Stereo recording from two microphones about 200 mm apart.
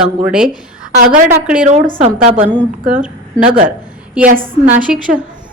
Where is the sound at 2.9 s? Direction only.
5° right (ahead or behind).